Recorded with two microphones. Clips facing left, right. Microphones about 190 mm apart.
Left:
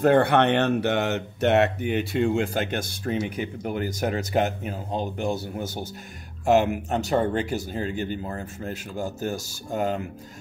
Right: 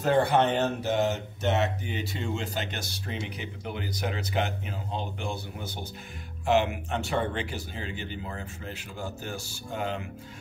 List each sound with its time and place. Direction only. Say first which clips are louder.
0.0 s speech: left 5 dB; 60° left (ahead or behind); by 10.0 s 40° left (ahead or behind)